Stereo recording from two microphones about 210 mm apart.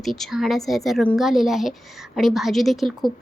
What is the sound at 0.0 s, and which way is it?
Speech, centre (ahead or behind).